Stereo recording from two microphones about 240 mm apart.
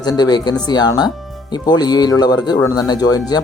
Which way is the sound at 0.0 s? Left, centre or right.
Centre.